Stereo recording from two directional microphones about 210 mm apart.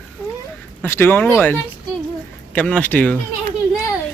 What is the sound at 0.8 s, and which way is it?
Speech, 10° left (ahead or behind).